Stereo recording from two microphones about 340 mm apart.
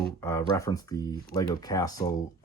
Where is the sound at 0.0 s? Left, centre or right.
Centre.